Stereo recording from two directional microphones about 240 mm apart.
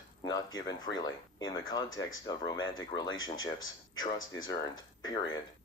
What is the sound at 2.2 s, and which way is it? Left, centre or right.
Speech, centre.